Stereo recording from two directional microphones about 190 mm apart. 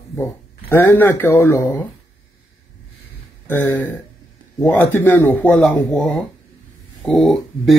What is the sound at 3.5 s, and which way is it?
A man's voice, 10° left (ahead or behind).